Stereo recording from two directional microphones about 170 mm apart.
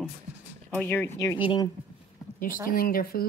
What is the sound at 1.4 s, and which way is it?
Speech, 30° left (ahead or behind).